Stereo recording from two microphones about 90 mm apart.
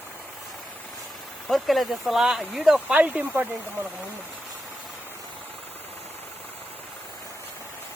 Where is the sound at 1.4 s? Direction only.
Centre (ahead or behind).